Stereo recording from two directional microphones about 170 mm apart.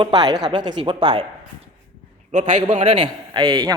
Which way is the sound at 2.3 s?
45° right (ahead or behind).